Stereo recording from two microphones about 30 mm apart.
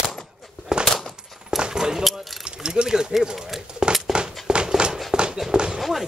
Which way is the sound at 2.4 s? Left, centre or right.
Right.